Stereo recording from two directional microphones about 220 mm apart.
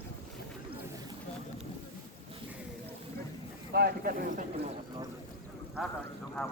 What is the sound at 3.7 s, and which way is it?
Speech, 45° right (ahead or behind).